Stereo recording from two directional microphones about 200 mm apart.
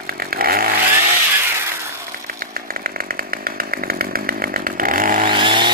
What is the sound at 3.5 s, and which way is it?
Chainsaw, 45° right (ahead or behind).